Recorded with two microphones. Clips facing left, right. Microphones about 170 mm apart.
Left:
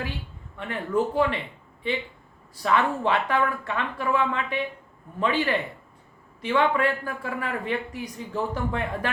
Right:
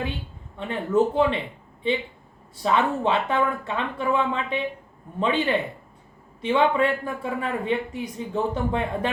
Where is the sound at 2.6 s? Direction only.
20° right (ahead or behind).